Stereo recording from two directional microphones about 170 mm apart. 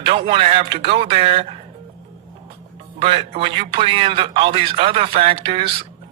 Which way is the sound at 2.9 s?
35° right (ahead or behind).